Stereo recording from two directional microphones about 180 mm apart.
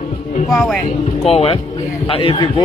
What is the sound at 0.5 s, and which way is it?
Speech, 5° left (ahead or behind).